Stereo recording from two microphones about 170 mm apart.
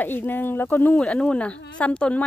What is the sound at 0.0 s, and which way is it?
Speech, 10° left (ahead or behind).